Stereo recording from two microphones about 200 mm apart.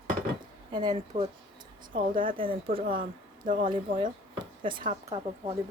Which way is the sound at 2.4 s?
25° right (ahead or behind).